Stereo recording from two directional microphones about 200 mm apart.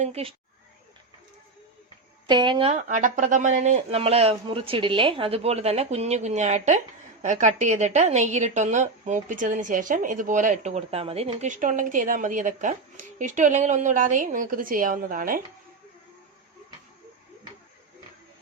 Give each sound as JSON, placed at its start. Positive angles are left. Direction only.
{"t": 0.0, "sound": "speech", "side_deg": -30}
{"t": 2.2, "sound": "speech", "side_deg": -20}